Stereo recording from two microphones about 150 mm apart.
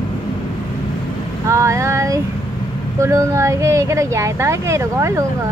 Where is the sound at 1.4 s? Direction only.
20° right (ahead or behind).